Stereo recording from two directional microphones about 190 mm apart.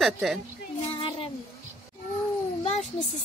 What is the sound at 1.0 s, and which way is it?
Child singing, 30° left (ahead or behind).